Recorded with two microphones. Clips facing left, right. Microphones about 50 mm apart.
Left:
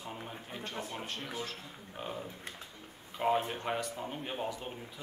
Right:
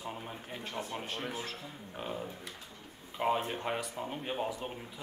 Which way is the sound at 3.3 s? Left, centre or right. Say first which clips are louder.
Left 1 dB; centre.